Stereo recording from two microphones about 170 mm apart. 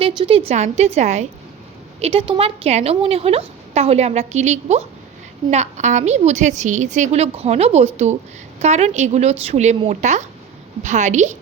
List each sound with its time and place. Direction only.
0.0 s a woman's voice: 30° right (ahead or behind)